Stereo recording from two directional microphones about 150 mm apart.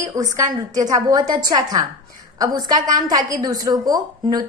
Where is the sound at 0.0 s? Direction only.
20° right (ahead or behind).